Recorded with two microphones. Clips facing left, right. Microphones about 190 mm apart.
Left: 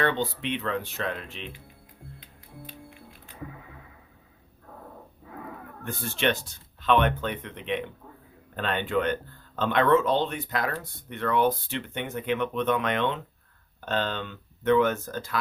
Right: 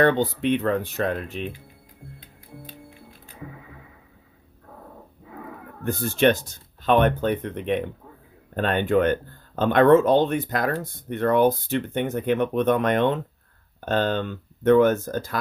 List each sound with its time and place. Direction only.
0.0 s speech: 45° right (ahead or behind)
5.8 s speech: 45° right (ahead or behind)